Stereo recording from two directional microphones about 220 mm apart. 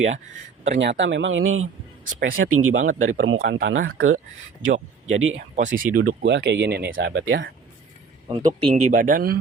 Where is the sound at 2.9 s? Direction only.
35° right (ahead or behind).